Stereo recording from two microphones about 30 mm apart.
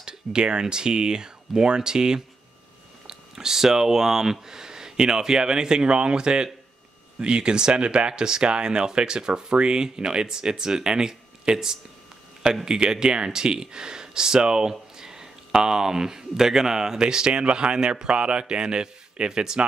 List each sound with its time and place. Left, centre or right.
0.0 s speech: right
8.1 s speech: right